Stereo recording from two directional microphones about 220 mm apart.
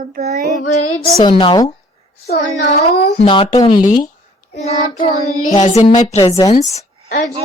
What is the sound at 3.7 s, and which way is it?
Speech, 35° left (ahead or behind).